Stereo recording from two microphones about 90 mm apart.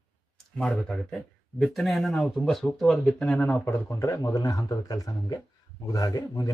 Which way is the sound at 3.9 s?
30° left (ahead or behind).